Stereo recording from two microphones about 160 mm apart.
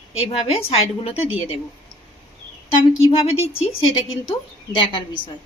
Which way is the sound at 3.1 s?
35° left (ahead or behind).